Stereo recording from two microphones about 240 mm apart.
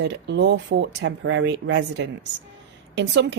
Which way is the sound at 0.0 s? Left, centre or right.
Right.